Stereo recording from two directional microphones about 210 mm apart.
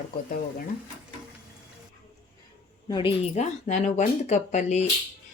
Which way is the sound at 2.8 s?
25° left (ahead or behind).